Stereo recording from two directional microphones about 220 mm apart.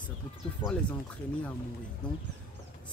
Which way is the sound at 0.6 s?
20° left (ahead or behind).